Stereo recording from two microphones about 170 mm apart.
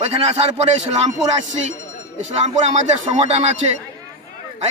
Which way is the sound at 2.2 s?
40° right (ahead or behind).